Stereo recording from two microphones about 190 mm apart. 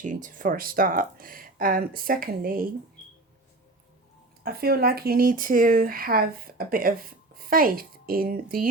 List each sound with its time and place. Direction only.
0.0 s speech: 45° right (ahead or behind)
4.4 s speech: 55° right (ahead or behind)